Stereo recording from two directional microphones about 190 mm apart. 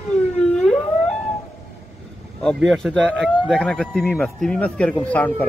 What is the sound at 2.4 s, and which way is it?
Speech, centre (ahead or behind).